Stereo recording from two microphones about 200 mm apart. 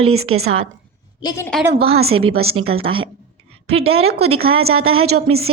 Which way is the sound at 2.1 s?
90° right.